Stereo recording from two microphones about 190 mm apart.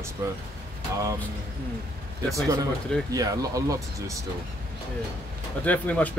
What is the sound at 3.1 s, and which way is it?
Speech, 20° right (ahead or behind).